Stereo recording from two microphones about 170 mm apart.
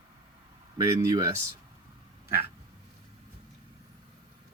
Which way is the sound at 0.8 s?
20° right (ahead or behind).